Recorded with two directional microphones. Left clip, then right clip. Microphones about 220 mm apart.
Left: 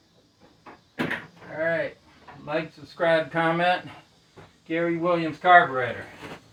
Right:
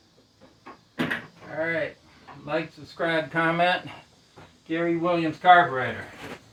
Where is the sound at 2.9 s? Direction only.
20° right (ahead or behind).